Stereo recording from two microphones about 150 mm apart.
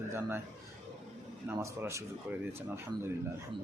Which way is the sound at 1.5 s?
15° right (ahead or behind).